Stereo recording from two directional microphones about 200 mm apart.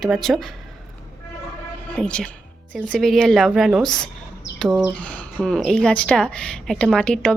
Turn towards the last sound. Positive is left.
turn(degrees=5)  # may be behind; listen again after turning